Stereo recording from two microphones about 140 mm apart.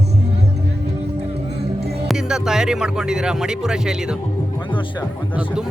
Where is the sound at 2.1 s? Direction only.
5° right (ahead or behind).